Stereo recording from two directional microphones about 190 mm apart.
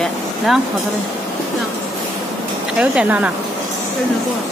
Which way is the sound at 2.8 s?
5° right (ahead or behind).